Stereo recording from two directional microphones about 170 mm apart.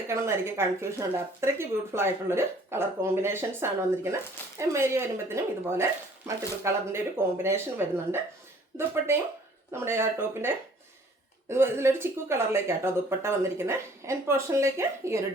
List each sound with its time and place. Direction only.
0.1 s speech: 15° right (ahead or behind)
9.7 s speech: 15° right (ahead or behind)